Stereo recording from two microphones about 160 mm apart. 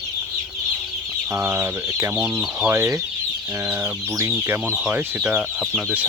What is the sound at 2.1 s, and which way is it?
Speech, 5° right (ahead or behind).